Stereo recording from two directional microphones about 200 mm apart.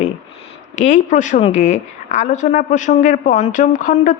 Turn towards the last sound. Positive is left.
turn(degrees=40)  # may be behind; listen again after turning